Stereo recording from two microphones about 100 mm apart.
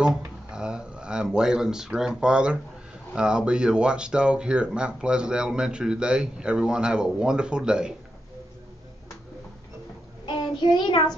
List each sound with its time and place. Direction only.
0.0 s speech: 10° right (ahead or behind)
10.2 s child singing: 50° left (ahead or behind)